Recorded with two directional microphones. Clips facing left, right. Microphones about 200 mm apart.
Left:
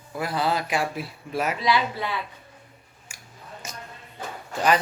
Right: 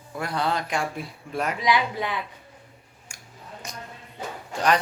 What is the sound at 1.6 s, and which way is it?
Speech, 15° right (ahead or behind).